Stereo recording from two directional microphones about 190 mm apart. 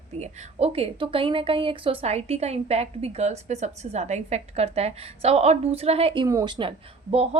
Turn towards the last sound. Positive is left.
turn(degrees=-35)  # may be behind; listen again after turning